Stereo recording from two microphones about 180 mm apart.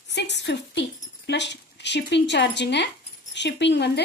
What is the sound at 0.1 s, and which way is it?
Speech, 75° left (ahead or behind).